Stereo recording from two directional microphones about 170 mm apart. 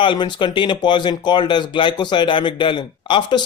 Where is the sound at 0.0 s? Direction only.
30° left (ahead or behind).